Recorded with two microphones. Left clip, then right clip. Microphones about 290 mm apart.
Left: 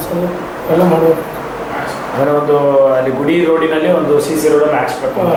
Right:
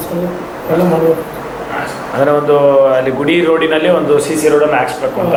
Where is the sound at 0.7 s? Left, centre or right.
Left.